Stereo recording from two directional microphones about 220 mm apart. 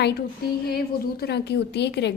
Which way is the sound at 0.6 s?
45° left (ahead or behind).